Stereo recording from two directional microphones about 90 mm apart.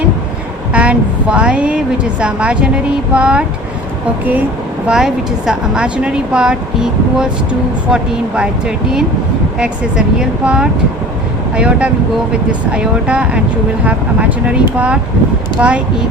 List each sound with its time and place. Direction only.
0.7 s a woman's voice: 15° right (ahead or behind)
4.9 s a woman's voice: 5° right (ahead or behind)